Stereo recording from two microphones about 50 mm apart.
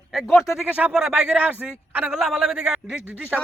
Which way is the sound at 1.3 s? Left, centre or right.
Right.